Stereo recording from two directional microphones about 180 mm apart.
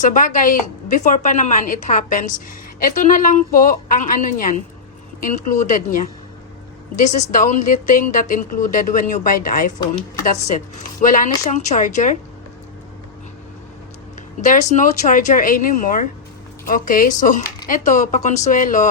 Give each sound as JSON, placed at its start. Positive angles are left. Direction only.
{"t": 0.0, "sound": "a woman's voice", "side_deg": 45}
{"t": 11.0, "sound": "a woman's voice", "side_deg": 45}
{"t": 14.4, "sound": "a woman's voice", "side_deg": 45}